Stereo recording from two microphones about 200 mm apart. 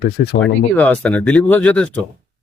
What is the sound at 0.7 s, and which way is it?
Speech, 5° left (ahead or behind).